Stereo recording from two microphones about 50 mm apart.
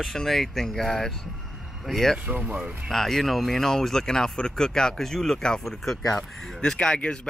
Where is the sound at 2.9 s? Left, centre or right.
Centre.